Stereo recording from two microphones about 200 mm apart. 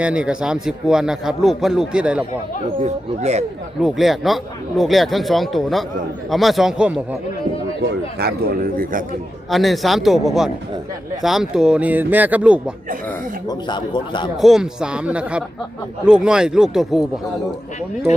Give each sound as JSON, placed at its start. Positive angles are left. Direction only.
{"t": 0.0, "sound": "a man's voice", "side_deg": -5}
{"t": 2.7, "sound": "speech", "side_deg": -35}
{"t": 3.8, "sound": "a man's voice", "side_deg": 0}
{"t": 7.8, "sound": "speech", "side_deg": -55}
{"t": 9.5, "sound": "a man's voice", "side_deg": 0}
{"t": 13.5, "sound": "speech", "side_deg": 20}
{"t": 14.4, "sound": "a man's voice", "side_deg": -5}